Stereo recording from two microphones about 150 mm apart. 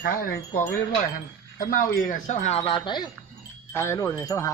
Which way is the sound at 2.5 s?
35° left (ahead or behind).